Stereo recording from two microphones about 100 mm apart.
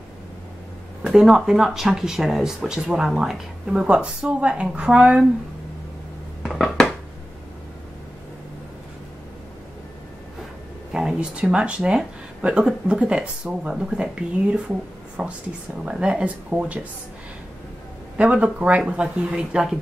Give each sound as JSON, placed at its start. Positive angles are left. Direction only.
{"t": 1.0, "sound": "speech", "side_deg": -5}
{"t": 6.4, "sound": "dishes", "side_deg": 0}
{"t": 10.9, "sound": "speech", "side_deg": -5}
{"t": 18.1, "sound": "speech", "side_deg": -10}